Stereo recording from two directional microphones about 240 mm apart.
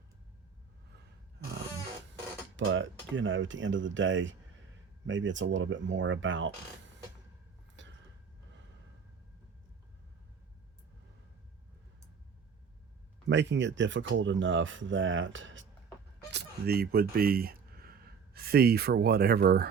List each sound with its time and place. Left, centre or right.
2.6 s speech: right
7.8 s a sound: right
13.2 s speech: right